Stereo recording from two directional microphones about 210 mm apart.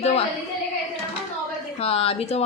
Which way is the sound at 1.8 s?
30° left (ahead or behind).